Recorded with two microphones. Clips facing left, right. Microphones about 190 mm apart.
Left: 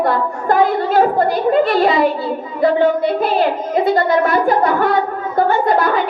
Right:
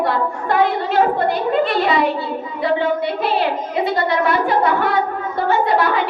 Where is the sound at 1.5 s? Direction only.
45° left (ahead or behind).